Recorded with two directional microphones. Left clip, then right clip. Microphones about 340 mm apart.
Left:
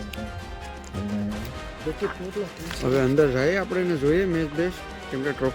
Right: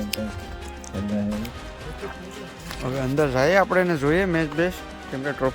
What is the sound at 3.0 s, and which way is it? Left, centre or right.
Speech, centre.